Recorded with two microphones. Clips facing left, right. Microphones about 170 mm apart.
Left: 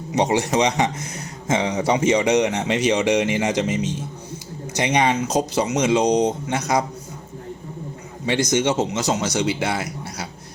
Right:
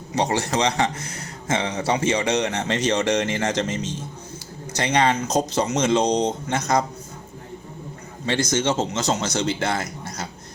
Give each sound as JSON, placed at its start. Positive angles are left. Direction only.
{"t": 0.1, "sound": "a man's voice", "side_deg": 15}
{"t": 8.3, "sound": "a man's voice", "side_deg": 15}